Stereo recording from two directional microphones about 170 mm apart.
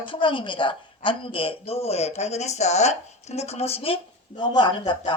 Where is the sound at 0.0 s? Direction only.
30° left (ahead or behind).